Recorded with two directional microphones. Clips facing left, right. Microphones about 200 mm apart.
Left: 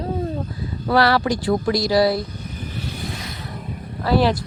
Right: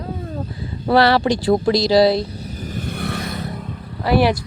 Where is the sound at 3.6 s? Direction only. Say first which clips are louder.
Right 1 dB; 10° left (ahead or behind).